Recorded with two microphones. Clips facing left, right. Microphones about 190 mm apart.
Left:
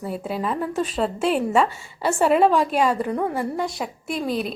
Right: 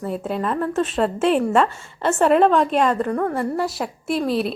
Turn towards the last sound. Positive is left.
turn(degrees=0)  # may be behind; listen again after turning